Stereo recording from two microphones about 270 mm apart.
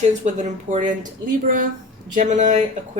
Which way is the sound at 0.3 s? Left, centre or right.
Right.